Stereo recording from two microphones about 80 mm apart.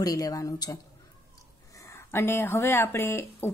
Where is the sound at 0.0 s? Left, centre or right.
Left.